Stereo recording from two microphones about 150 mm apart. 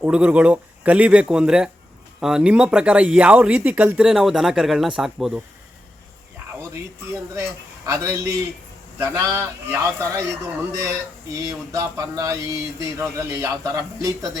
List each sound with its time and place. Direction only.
0.0 s speech: 10° right (ahead or behind)
7.9 s a man's voice: 20° right (ahead or behind)